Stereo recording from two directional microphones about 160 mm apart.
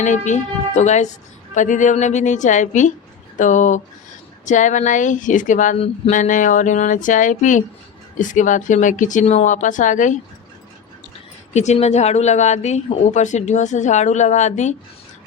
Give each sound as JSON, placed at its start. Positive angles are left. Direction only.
{"t": 0.0, "sound": "speech", "side_deg": 50}
{"t": 11.5, "sound": "speech", "side_deg": 45}